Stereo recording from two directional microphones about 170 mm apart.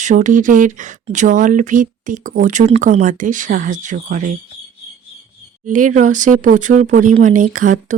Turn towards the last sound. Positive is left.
turn(degrees=-50)  # may be behind; listen again after turning